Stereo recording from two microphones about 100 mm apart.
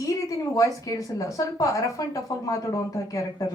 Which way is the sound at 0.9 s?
35° left (ahead or behind).